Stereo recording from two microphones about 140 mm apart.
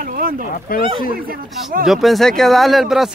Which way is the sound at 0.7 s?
90° left.